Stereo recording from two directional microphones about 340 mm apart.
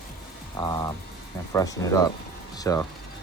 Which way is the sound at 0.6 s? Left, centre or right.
Centre.